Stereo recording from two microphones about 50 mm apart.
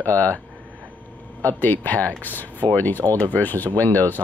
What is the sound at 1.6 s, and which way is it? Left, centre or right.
Speech, left.